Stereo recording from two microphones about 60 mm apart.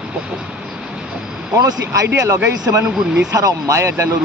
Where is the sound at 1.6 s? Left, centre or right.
Right.